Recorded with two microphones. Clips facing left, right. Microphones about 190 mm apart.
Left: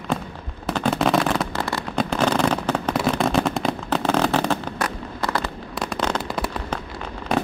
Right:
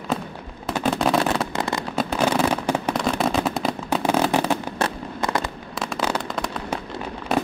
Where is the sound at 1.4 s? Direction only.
20° right (ahead or behind).